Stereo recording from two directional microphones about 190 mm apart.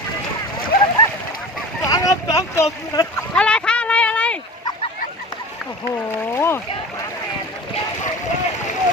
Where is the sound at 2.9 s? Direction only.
20° left (ahead or behind).